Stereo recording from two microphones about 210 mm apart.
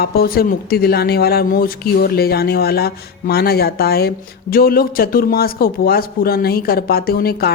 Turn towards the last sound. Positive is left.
turn(degrees=45)  # may be behind; listen again after turning